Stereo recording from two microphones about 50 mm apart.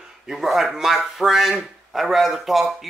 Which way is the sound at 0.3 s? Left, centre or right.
Centre.